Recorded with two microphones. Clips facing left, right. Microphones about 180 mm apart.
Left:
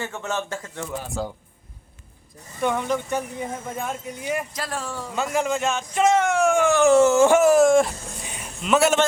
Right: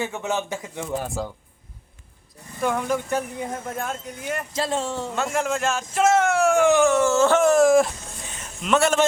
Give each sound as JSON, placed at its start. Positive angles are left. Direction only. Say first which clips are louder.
{"t": 0.0, "sound": "a man's voice", "louder": "right 2 dB", "side_deg": -15}
{"t": 2.6, "sound": "speech", "louder": "even", "side_deg": -5}
{"t": 4.5, "sound": "speech", "louder": "right 5 dB", "side_deg": -25}
{"t": 5.1, "sound": "speech", "louder": "left 3 dB", "side_deg": 0}
{"t": 6.9, "sound": "a sound", "louder": "left 3 dB", "side_deg": 20}
{"t": 8.6, "sound": "speech", "louder": "left 1 dB", "side_deg": 0}